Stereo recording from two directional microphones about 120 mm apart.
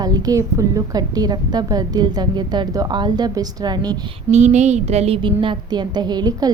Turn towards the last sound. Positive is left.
turn(degrees=-35)  # may be behind; listen again after turning